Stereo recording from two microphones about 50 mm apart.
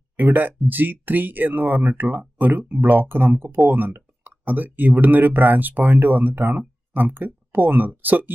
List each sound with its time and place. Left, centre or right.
0.2 s speech: right